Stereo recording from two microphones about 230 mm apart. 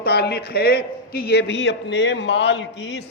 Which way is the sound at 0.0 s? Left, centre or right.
Left.